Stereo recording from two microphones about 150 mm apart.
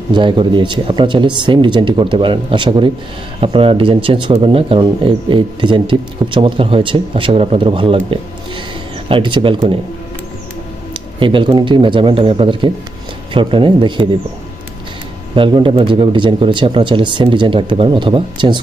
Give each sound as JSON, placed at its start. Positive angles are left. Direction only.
{"t": 0.1, "sound": "speech", "side_deg": -30}
{"t": 10.9, "sound": "speech", "side_deg": -35}
{"t": 15.3, "sound": "speech", "side_deg": -35}